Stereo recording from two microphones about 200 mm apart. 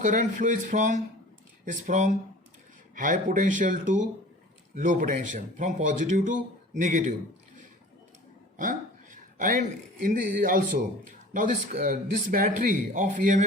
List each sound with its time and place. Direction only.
0.0 s speech: 40° right (ahead or behind)
9.4 s speech: 40° right (ahead or behind)